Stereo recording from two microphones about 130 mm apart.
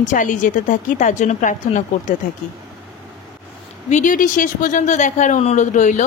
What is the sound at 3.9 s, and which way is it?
A woman's voice, 85° left.